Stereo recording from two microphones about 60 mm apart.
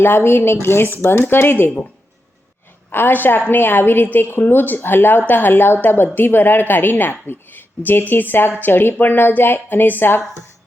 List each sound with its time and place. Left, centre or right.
0.0 s a woman's voice: left
2.9 s a woman's voice: left